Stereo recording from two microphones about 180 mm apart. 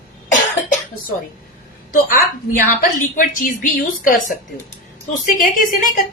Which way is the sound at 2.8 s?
50° left (ahead or behind).